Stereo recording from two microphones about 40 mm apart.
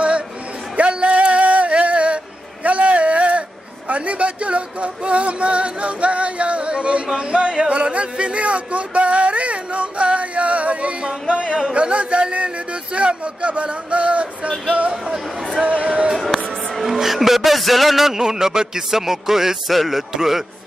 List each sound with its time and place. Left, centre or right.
0.7 s music: right
2.6 s a sound: right
3.9 s music: right
7.2 s speech: right
7.7 s a sound: right
11.7 s speech: right
15.6 s speech: right
16.2 s music: centre